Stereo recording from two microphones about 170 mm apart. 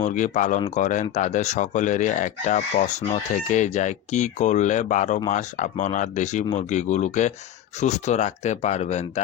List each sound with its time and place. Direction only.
0.0 s speech: 45° left (ahead or behind)